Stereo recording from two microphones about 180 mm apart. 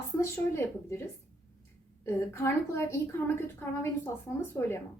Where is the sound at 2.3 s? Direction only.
15° left (ahead or behind).